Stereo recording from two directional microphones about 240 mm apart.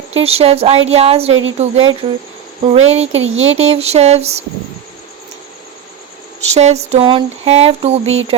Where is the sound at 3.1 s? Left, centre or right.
Right.